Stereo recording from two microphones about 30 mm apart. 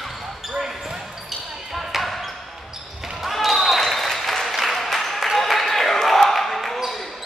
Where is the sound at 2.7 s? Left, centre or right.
Centre.